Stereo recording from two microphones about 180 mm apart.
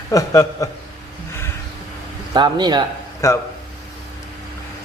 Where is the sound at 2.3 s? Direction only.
25° right (ahead or behind).